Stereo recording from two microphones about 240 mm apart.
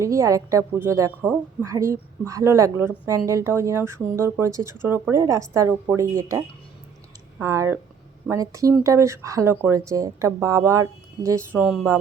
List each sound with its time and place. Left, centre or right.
0.0 s a woman's voice: centre